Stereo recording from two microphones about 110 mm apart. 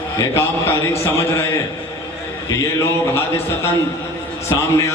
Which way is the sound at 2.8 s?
25° left (ahead or behind).